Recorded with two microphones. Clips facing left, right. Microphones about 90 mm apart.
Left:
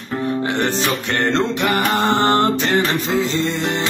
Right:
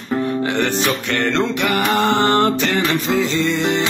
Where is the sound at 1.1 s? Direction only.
35° left (ahead or behind).